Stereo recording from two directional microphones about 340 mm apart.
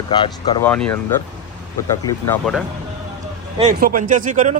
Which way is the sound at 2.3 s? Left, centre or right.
Centre.